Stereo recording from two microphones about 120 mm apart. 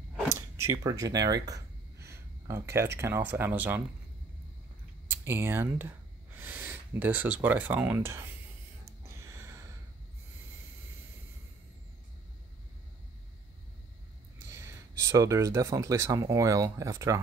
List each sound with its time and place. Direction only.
0.3 s speech: 25° right (ahead or behind)
5.1 s speech: 20° right (ahead or behind)
9.2 s a sound: 25° right (ahead or behind)
14.4 s speech: 25° right (ahead or behind)